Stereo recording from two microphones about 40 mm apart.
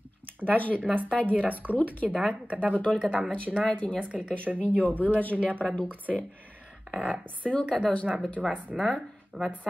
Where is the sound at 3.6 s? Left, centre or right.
Left.